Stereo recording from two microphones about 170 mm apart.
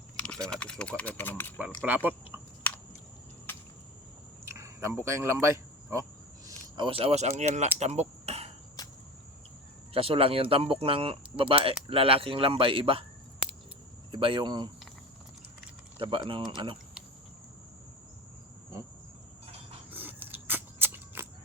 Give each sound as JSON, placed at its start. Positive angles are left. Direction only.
{"t": 0.2, "sound": "speech", "side_deg": 5}
{"t": 1.9, "sound": "speech", "side_deg": -10}
{"t": 4.4, "sound": "a sound", "side_deg": -15}
{"t": 6.7, "sound": "speech", "side_deg": -30}
{"t": 7.8, "sound": "a sound", "side_deg": -40}
{"t": 9.9, "sound": "speech", "side_deg": -35}
{"t": 14.1, "sound": "speech", "side_deg": -30}
{"t": 16.0, "sound": "speech", "side_deg": -30}
{"t": 19.9, "sound": "a sound", "side_deg": -10}